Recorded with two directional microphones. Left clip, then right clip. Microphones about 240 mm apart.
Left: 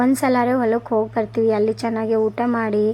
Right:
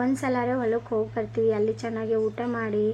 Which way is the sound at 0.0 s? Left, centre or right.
Left.